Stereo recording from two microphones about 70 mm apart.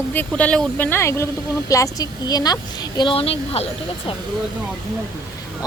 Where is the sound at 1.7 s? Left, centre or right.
Left.